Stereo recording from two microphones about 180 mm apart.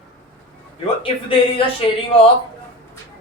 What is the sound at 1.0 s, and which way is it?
Speech, 30° left (ahead or behind).